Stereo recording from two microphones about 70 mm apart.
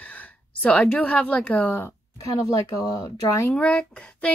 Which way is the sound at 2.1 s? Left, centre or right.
Left.